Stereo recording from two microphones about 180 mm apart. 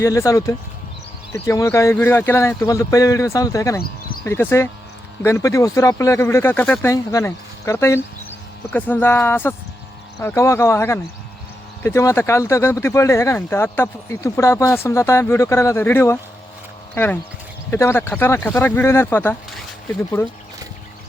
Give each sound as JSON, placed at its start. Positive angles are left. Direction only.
{"t": 0.0, "sound": "speech", "side_deg": 15}